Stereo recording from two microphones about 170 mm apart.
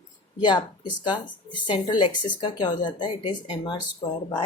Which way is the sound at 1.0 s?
25° left (ahead or behind).